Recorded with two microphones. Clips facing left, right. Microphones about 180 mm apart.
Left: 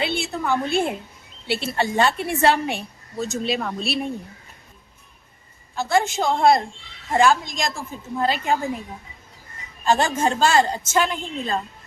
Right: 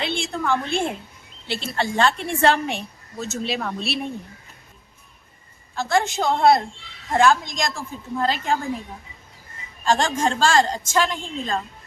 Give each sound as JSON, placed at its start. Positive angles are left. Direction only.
{"t": 0.0, "sound": "a woman's voice", "side_deg": 5}
{"t": 5.9, "sound": "a woman's voice", "side_deg": 0}
{"t": 7.7, "sound": "a woman's voice", "side_deg": 15}
{"t": 9.8, "sound": "a woman's voice", "side_deg": 5}